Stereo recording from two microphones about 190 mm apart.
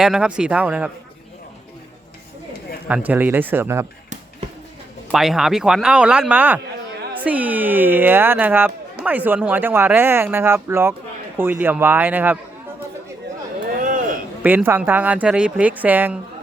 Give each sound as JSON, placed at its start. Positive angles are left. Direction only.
{"t": 0.0, "sound": "speech", "side_deg": -5}
{"t": 2.8, "sound": "speech", "side_deg": -10}
{"t": 5.1, "sound": "speech", "side_deg": 0}
{"t": 13.8, "sound": "a sound", "side_deg": -45}
{"t": 14.4, "sound": "speech", "side_deg": -10}